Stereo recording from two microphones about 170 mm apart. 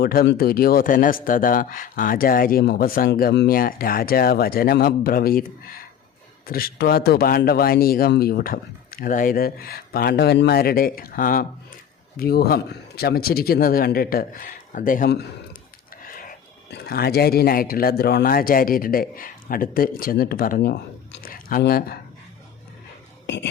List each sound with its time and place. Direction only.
0.0 s speech: 65° left (ahead or behind)
16.7 s speech: 65° left (ahead or behind)
23.2 s speech: 90° left